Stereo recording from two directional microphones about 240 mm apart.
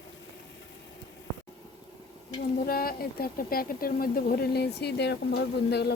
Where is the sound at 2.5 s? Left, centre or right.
Left.